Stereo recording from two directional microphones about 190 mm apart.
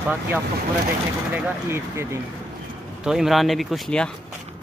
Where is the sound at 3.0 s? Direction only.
Centre (ahead or behind).